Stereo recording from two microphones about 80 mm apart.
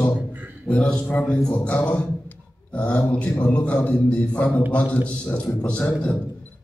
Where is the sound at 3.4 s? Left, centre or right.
Centre.